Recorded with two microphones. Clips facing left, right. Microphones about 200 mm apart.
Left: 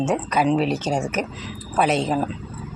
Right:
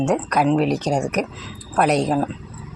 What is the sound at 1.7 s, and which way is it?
Speech, centre (ahead or behind).